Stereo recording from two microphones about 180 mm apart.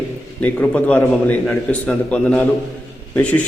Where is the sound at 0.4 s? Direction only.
10° left (ahead or behind).